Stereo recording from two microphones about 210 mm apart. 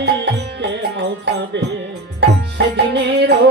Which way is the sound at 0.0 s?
55° right (ahead or behind).